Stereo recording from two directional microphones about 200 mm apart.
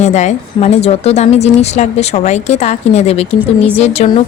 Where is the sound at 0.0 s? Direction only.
35° left (ahead or behind).